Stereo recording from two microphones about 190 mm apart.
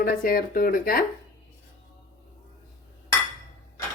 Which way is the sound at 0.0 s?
50° left (ahead or behind).